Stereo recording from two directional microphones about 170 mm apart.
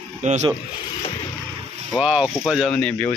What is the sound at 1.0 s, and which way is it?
Vehicle, 35° left (ahead or behind).